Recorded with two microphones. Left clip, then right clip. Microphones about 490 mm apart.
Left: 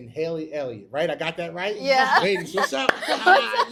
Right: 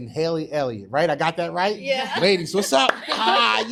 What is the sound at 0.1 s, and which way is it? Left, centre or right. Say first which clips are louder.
Speech: right 4 dB; right.